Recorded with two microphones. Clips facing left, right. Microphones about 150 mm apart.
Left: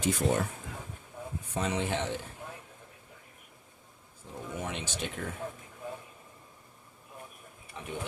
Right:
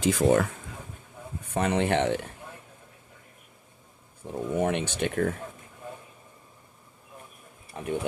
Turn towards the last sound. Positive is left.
turn(degrees=-45)  # may be behind; listen again after turning